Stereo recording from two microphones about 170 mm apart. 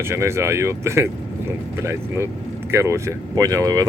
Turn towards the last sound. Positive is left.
turn(degrees=-20)  # may be behind; listen again after turning